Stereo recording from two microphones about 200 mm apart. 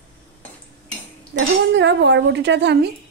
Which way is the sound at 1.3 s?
60° right (ahead or behind).